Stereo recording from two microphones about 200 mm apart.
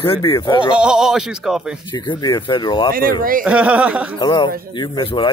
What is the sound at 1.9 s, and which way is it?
Speech, 25° left (ahead or behind).